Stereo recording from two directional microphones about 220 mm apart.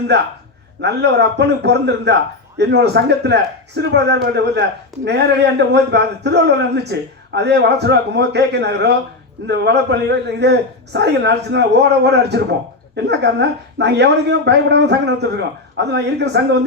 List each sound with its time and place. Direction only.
0.8 s speech: 50° right (ahead or behind)